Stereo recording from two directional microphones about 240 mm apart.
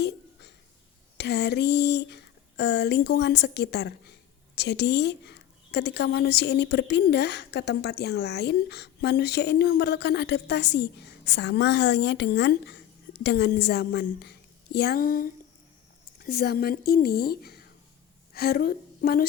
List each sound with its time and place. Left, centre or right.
1.2 s a woman's voice: left